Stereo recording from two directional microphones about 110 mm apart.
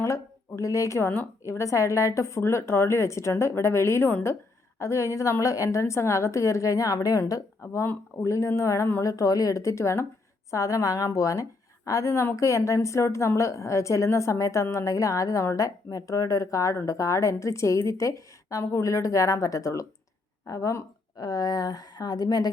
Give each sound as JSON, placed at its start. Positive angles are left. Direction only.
{"t": 0.0, "sound": "a woman's voice", "side_deg": 25}